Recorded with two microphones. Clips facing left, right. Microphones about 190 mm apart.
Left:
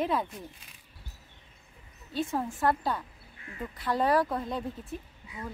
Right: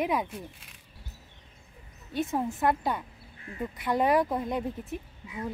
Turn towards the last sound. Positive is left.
turn(degrees=-20)  # may be behind; listen again after turning